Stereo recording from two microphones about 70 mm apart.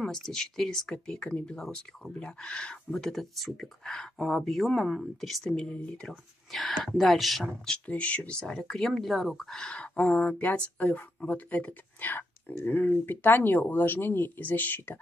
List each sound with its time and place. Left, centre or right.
0.0 s speech: centre
5.4 s speech: centre
7.4 s speech: centre
9.7 s speech: centre